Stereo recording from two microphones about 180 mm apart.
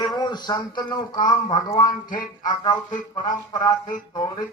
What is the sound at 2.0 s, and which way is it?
Music, 50° left (ahead or behind).